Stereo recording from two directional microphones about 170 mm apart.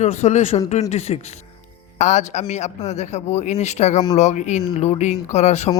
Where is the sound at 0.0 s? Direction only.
40° left (ahead or behind).